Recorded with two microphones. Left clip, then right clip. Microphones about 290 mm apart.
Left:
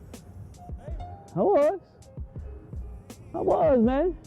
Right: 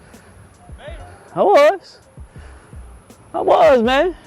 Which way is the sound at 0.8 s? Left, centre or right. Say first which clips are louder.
Right 8 dB; centre.